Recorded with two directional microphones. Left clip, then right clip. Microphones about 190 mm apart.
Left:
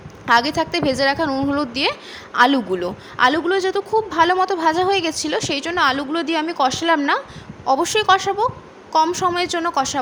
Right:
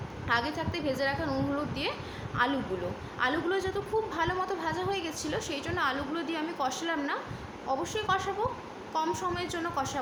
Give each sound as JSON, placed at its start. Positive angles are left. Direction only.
{"t": 0.3, "sound": "a woman's voice", "side_deg": 55}